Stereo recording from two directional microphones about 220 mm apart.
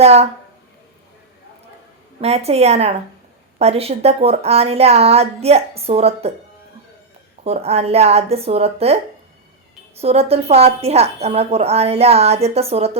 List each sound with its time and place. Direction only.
0.0 s a woman's voice: 30° right (ahead or behind)
2.2 s a woman's voice: 30° right (ahead or behind)
7.4 s a woman's voice: 30° right (ahead or behind)
10.0 s a woman's voice: 30° right (ahead or behind)